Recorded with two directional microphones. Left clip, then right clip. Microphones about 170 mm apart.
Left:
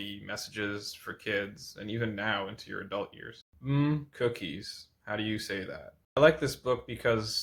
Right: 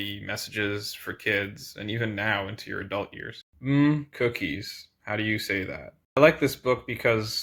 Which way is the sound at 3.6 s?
15° right (ahead or behind).